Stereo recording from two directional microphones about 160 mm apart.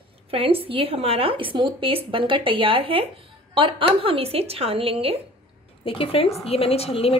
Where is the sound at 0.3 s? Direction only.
35° right (ahead or behind).